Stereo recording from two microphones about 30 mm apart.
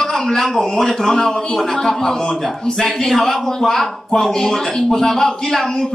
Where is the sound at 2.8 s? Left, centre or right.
Centre.